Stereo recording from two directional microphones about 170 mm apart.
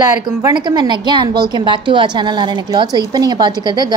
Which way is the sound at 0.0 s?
20° right (ahead or behind).